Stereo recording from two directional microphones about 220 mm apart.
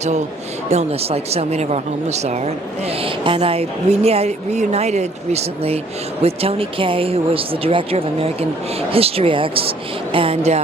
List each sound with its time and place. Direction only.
0.7 s speech: 30° right (ahead or behind)